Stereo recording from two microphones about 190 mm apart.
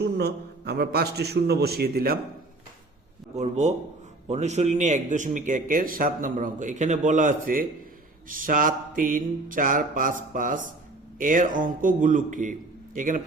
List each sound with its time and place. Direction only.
0.2 s a man's voice: 60° right (ahead or behind)
3.3 s a man's voice: 35° right (ahead or behind)
8.3 s a sound: 45° right (ahead or behind)